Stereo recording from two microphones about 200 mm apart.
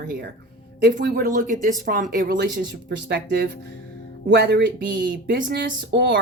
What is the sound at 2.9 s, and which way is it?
Speech, 60° right (ahead or behind).